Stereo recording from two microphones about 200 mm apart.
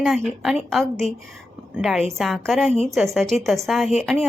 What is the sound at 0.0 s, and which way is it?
A woman's voice, centre (ahead or behind).